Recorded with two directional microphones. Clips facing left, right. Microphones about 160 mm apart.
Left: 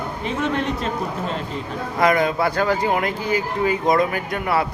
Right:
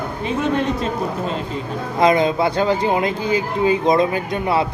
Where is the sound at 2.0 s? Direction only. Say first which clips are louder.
Right 3 dB; 20° right (ahead or behind).